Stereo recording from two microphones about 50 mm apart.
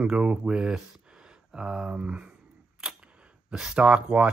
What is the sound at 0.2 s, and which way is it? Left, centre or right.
Speech, right.